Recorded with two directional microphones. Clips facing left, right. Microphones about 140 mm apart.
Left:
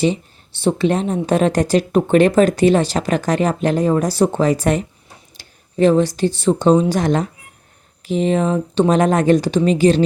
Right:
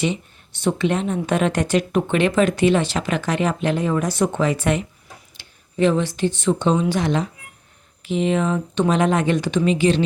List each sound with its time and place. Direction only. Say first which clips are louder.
0.0 s speech: left 5 dB; 35° left (ahead or behind)